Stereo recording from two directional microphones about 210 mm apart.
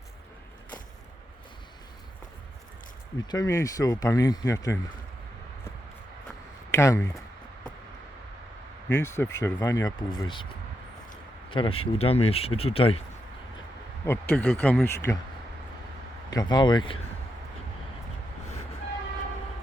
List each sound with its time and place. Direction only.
3.3 s speech: 15° left (ahead or behind)
6.7 s speech: 15° left (ahead or behind)
9.0 s speech: 15° left (ahead or behind)
11.5 s speech: 25° left (ahead or behind)
14.0 s speech: 10° left (ahead or behind)
16.3 s speech: 20° left (ahead or behind)